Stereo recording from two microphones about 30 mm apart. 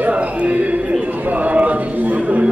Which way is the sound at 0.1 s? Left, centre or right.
Right.